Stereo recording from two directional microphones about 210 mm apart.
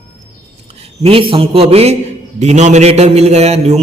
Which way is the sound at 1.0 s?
25° right (ahead or behind).